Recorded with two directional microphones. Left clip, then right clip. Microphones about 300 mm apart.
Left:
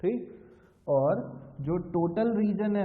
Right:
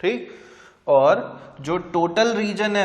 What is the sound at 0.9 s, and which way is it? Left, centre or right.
A man's voice, centre.